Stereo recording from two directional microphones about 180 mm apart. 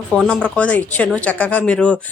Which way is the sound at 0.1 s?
5° left (ahead or behind).